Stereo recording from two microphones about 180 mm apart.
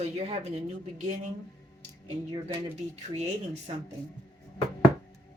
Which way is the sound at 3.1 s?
40° right (ahead or behind).